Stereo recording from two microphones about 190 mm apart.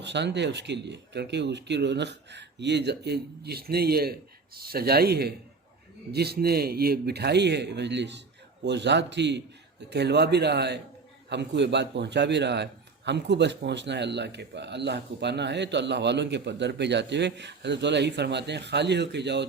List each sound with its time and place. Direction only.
0.0 s speech: 65° right (ahead or behind)